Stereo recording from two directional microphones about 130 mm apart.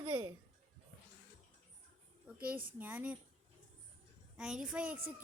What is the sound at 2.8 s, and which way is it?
Speech, 10° right (ahead or behind).